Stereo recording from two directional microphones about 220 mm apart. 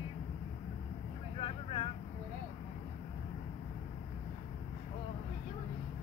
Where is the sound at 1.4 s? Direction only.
25° left (ahead or behind).